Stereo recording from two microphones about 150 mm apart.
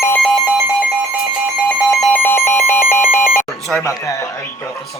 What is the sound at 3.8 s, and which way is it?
Speech, 20° left (ahead or behind).